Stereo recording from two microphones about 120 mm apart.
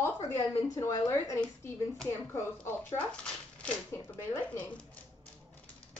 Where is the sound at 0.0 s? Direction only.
20° left (ahead or behind).